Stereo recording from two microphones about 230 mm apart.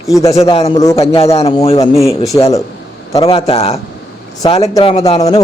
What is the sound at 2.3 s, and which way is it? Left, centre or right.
Speech, centre.